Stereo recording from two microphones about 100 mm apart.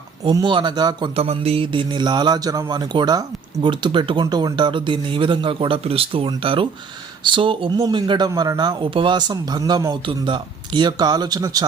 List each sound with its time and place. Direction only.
0.4 s speech: 50° right (ahead or behind)
1.1 s speech: 85° right; by 8.3 s 50° right (ahead or behind)
8.3 s speech: 40° right (ahead or behind)